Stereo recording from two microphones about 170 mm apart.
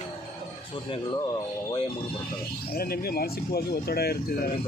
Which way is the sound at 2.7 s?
65° left (ahead or behind).